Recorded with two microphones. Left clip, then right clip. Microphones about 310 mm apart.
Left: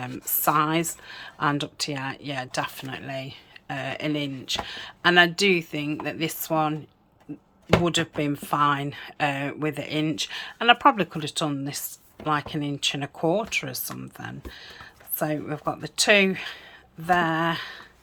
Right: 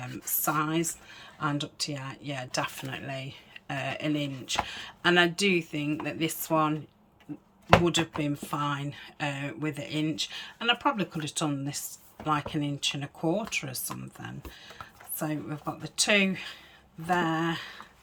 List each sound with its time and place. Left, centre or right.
0.4 s speech: centre
7.9 s speech: centre